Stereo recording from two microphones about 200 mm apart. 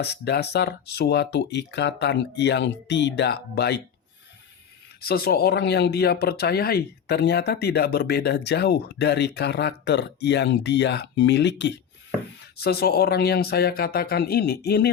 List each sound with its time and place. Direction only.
0.0 s speech: 55° left (ahead or behind)
4.9 s speech: 50° left (ahead or behind)